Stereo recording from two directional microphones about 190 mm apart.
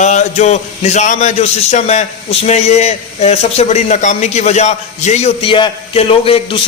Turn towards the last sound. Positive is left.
turn(degrees=30)  # may be behind; listen again after turning